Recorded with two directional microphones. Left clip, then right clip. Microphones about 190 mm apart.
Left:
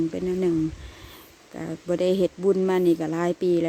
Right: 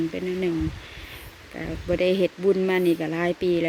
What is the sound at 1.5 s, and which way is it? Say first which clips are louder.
A woman's voice: right 1 dB; 10° left (ahead or behind).